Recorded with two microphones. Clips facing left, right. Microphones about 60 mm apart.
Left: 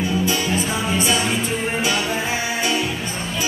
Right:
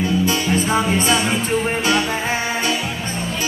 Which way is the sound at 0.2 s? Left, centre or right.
Right.